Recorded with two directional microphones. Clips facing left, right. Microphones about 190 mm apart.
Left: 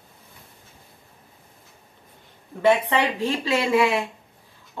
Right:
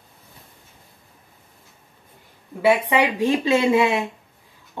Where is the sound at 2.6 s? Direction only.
10° right (ahead or behind).